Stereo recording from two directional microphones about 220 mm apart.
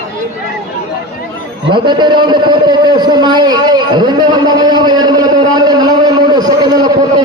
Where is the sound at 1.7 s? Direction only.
20° right (ahead or behind).